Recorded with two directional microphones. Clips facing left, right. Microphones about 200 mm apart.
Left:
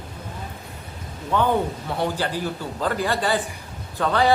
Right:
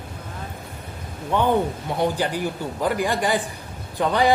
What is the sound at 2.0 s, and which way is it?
Speech, 15° right (ahead or behind).